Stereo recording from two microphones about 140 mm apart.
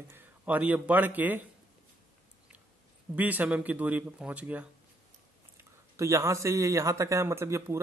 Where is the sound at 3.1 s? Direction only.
10° right (ahead or behind).